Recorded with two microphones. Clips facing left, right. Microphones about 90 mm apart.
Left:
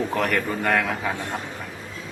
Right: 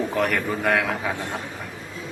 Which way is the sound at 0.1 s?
Centre (ahead or behind).